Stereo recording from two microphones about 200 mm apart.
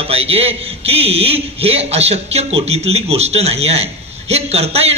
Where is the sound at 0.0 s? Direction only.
30° right (ahead or behind).